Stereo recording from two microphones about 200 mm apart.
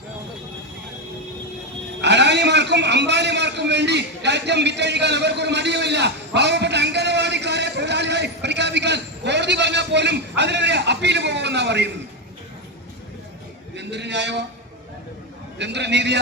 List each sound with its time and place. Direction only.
2.0 s a man's voice: 60° right (ahead or behind)
13.7 s a sound: 60° right (ahead or behind)
15.5 s a man's voice: 60° right (ahead or behind)